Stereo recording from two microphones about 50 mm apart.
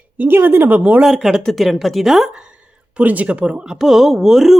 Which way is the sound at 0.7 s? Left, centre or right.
Right.